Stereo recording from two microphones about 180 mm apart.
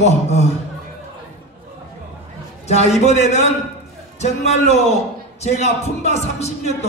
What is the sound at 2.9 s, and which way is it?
A man's voice, 40° left (ahead or behind).